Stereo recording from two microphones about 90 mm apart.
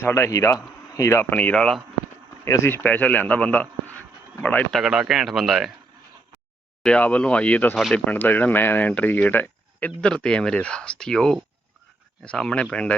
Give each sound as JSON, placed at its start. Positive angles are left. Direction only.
{"t": 0.0, "sound": "speech", "side_deg": 30}
{"t": 1.3, "sound": "speech", "side_deg": 15}
{"t": 2.4, "sound": "speech", "side_deg": 35}
{"t": 4.7, "sound": "speech", "side_deg": -5}
{"t": 6.8, "sound": "speech", "side_deg": 15}